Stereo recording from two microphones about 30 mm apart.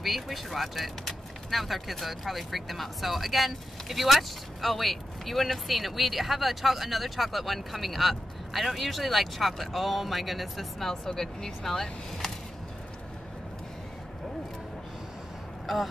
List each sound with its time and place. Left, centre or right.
0.0 s speech: centre
10.9 s speech: centre
15.6 s speech: centre